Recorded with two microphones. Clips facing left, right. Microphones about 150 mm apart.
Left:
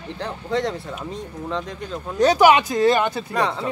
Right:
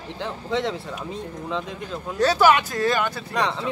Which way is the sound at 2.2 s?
15° left (ahead or behind).